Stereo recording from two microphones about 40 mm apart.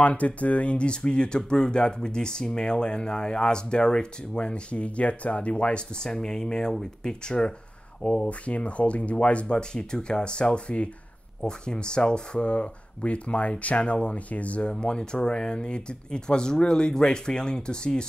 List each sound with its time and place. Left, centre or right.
0.0 s speech: left
8.3 s speech: left
14.7 s speech: left